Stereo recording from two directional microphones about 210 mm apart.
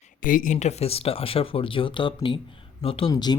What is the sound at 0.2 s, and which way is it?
Speech, 40° left (ahead or behind).